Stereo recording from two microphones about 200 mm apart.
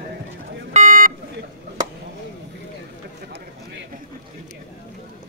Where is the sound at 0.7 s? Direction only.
40° right (ahead or behind).